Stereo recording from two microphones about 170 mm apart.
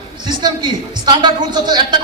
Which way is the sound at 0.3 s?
25° right (ahead or behind).